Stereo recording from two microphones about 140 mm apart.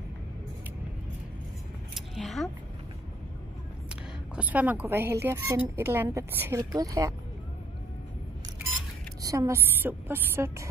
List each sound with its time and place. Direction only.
2.0 s scissors: centre (ahead or behind)
3.9 s a woman's voice: 10° right (ahead or behind)
9.2 s a woman's voice: 25° right (ahead or behind)